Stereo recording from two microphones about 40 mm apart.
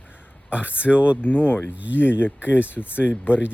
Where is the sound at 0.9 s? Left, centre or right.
Left.